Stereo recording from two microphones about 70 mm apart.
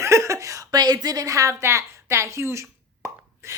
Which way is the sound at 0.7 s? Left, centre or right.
Right.